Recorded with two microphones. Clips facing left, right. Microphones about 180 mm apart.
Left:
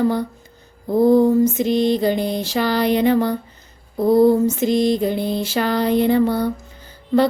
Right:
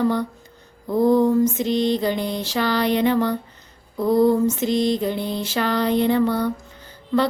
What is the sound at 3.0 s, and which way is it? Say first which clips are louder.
Music: left 3 dB; 40° left (ahead or behind).